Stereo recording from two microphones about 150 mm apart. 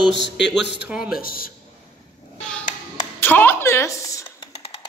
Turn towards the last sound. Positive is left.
turn(degrees=20)  # may be behind; listen again after turning